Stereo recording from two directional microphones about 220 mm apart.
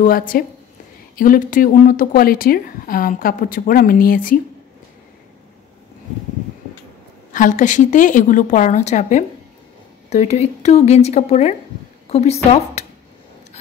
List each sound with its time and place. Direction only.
0.0 s a woman's voice: 40° left (ahead or behind)
7.3 s a woman's voice: 35° left (ahead or behind)